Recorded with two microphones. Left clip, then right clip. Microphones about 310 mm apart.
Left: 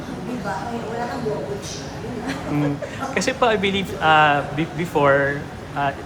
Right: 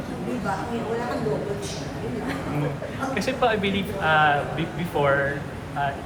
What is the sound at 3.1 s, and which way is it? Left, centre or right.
Speech, left.